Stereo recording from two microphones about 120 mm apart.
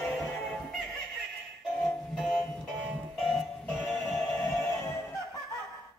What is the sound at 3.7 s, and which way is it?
Music, 5° right (ahead or behind).